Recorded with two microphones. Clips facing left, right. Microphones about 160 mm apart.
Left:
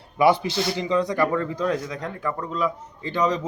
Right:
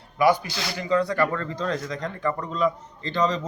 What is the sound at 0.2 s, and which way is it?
Speech, 25° left (ahead or behind).